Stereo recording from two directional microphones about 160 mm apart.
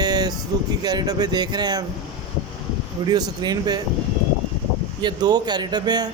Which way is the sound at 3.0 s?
25° right (ahead or behind).